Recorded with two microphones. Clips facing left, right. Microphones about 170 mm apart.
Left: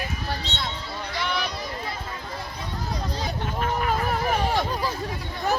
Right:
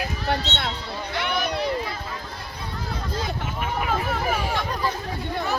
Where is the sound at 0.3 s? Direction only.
60° right (ahead or behind).